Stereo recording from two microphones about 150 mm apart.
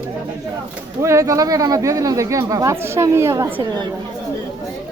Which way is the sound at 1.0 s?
20° right (ahead or behind).